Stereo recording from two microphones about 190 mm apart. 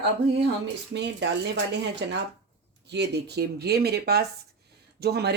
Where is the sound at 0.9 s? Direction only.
65° right (ahead or behind).